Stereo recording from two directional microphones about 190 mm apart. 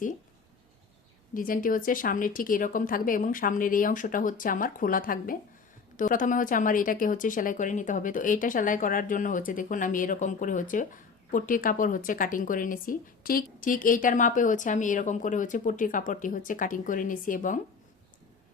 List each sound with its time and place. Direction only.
1.3 s a woman's voice: 45° left (ahead or behind)